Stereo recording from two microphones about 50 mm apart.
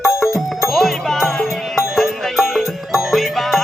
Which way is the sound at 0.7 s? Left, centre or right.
Centre.